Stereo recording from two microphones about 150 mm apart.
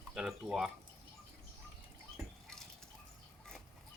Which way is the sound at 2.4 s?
5° left (ahead or behind).